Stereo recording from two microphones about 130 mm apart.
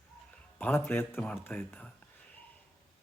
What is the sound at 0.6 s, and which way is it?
Speech, 15° left (ahead or behind).